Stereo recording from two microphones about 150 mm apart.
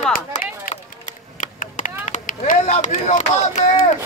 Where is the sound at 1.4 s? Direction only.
60° left (ahead or behind).